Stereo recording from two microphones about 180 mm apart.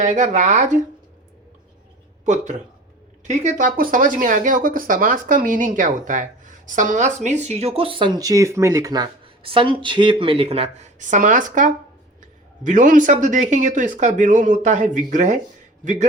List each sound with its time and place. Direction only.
0.0 s speech: 40° right (ahead or behind)
2.2 s a man's voice: 40° right (ahead or behind)